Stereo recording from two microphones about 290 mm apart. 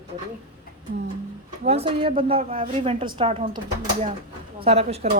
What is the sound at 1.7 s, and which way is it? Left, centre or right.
A woman's voice, centre.